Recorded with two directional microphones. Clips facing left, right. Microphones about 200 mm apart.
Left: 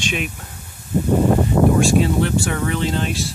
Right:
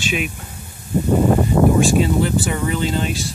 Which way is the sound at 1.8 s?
Centre (ahead or behind).